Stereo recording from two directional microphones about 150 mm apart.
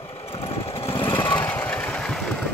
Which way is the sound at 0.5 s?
40° left (ahead or behind).